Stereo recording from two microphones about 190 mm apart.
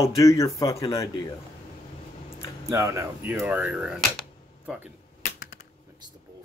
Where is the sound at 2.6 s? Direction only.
15° right (ahead or behind).